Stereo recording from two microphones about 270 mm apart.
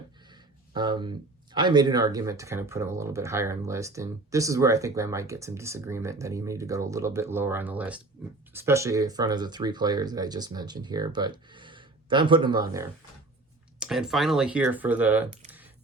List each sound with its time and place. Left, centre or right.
0.7 s speech: centre
13.7 s speech: centre
15.4 s a sound: centre